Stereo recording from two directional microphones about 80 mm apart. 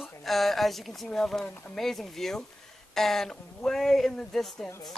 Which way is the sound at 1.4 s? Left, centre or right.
Centre.